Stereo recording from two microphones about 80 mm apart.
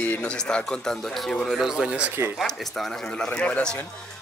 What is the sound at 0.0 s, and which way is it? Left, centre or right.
A man's voice, centre.